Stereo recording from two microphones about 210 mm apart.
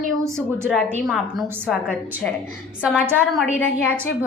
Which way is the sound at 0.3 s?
5° left (ahead or behind).